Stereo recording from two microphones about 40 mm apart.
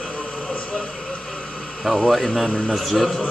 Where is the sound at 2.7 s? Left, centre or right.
Centre.